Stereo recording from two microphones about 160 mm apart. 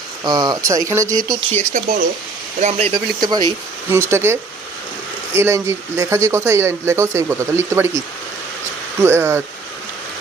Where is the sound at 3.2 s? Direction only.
25° right (ahead or behind).